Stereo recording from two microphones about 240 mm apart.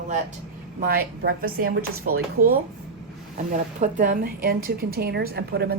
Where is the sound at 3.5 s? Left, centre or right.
Right.